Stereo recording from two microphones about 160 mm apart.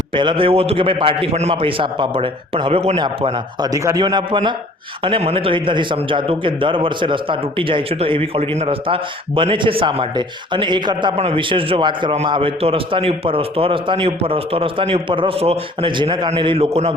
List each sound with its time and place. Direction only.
0.1 s a man's voice: 30° right (ahead or behind)
3.7 s a man's voice: 20° right (ahead or behind); by 16.9 s 40° right (ahead or behind)